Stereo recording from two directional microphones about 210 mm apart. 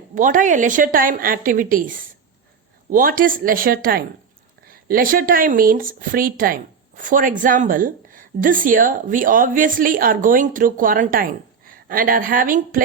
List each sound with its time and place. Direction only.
0.1 s speech: 40° right (ahead or behind)